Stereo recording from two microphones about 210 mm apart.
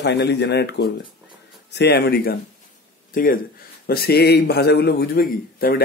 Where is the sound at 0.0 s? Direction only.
55° left (ahead or behind).